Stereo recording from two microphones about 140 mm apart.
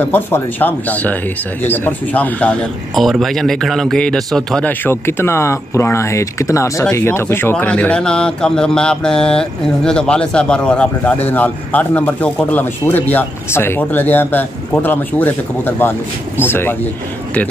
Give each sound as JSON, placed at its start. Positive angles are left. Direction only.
{"t": 0.0, "sound": "speech", "side_deg": 15}